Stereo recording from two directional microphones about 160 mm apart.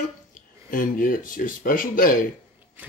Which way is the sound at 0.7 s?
60° left (ahead or behind).